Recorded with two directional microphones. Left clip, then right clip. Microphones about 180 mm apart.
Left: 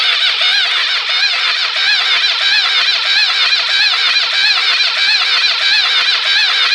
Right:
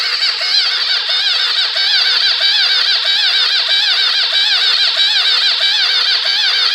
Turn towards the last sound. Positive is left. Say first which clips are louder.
# left 2 dB
turn(degrees=-30)  # may be behind; listen again after turning